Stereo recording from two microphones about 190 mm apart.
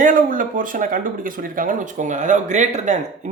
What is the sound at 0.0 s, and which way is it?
Speech, 45° right (ahead or behind).